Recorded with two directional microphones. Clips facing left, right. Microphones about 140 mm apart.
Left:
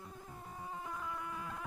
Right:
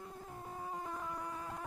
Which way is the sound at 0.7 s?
35° right (ahead or behind).